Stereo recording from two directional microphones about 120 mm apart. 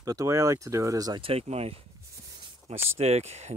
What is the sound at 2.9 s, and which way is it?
Speech, 60° right (ahead or behind).